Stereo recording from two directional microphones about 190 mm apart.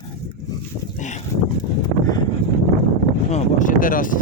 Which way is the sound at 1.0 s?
40° left (ahead or behind).